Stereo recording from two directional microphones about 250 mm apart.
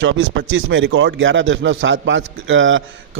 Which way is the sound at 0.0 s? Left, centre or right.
Right.